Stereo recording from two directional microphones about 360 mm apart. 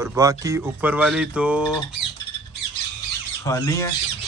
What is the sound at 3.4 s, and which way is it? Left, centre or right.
Speech, centre.